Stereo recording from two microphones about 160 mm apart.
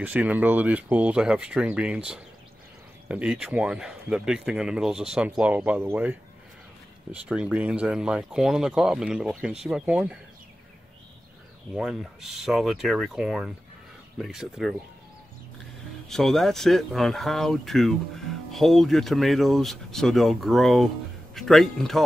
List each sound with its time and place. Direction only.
0.0 s speech: 10° right (ahead or behind)
11.7 s speech: centre (ahead or behind)
16.1 s speech: centre (ahead or behind)